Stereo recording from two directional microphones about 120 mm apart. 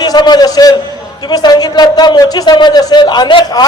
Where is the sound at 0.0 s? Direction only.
35° left (ahead or behind).